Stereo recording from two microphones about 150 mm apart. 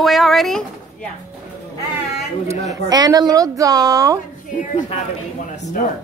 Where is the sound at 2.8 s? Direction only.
25° right (ahead or behind).